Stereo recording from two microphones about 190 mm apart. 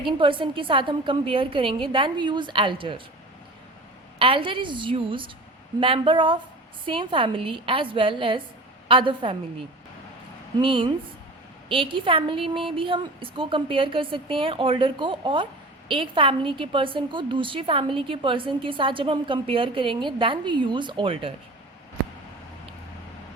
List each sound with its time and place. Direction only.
0.0 s a woman's voice: 25° right (ahead or behind)
4.2 s a woman's voice: 25° right (ahead or behind)